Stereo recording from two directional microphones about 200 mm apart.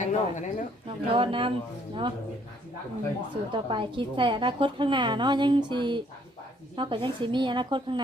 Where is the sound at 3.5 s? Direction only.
25° right (ahead or behind).